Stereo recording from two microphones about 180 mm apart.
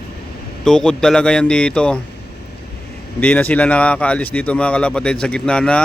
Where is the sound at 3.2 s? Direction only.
10° left (ahead or behind).